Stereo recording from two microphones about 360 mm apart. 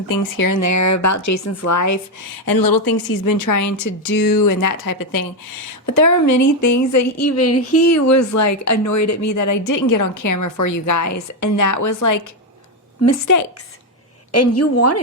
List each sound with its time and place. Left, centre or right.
0.1 s speech: left
2.5 s a woman's voice: left
14.3 s a woman's voice: left